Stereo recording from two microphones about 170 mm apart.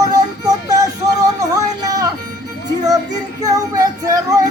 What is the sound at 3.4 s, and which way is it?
Music, 20° right (ahead or behind).